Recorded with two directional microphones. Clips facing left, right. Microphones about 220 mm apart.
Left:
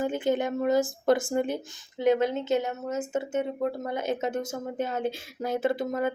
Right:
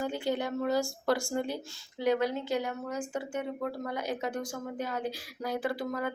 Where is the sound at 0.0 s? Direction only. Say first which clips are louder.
Left 5 dB; 20° left (ahead or behind).